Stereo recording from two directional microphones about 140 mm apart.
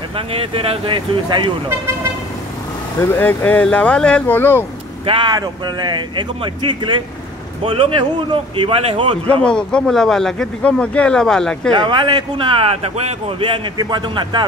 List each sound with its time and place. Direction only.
0.1 s speech: 40° right (ahead or behind)
3.0 s speech: 15° left (ahead or behind)
5.0 s speech: 35° right (ahead or behind)
9.4 s speech: 5° left (ahead or behind)
11.8 s speech: 35° right (ahead or behind)